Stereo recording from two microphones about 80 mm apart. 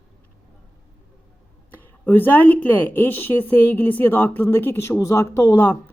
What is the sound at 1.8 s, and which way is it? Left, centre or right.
A woman's voice, left.